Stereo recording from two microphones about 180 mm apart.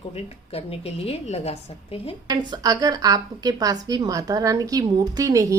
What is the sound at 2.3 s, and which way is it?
A woman's voice, 20° right (ahead or behind).